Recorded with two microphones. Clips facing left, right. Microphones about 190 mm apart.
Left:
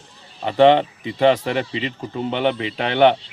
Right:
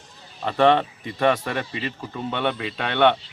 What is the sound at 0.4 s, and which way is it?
Speech, 25° left (ahead or behind).